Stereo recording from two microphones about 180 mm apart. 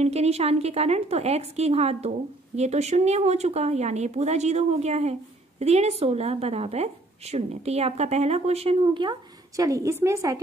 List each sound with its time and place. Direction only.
0.0 s a woman's voice: 35° right (ahead or behind)
9.6 s a woman's voice: 20° right (ahead or behind)